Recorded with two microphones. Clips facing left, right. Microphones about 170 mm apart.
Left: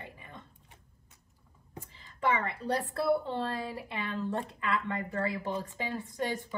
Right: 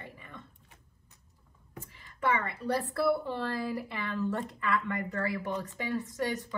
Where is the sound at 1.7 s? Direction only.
25° left (ahead or behind).